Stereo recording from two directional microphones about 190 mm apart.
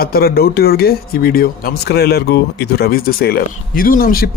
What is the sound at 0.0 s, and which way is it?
Speech, 50° left (ahead or behind).